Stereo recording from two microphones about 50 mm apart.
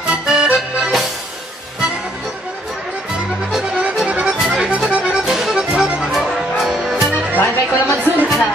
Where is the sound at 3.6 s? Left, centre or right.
Right.